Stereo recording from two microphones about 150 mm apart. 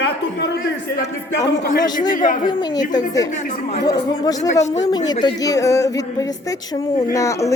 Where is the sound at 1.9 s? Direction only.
60° left (ahead or behind).